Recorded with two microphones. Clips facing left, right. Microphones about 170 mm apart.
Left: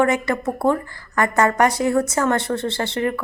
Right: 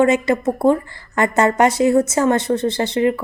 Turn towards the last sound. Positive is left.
turn(degrees=-20)  # may be behind; listen again after turning